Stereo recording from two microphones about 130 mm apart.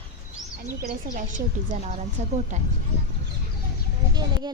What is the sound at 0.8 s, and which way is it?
A woman's voice, 85° right.